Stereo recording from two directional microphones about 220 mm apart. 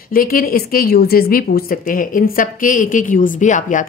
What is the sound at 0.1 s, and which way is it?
A woman's voice, 40° left (ahead or behind).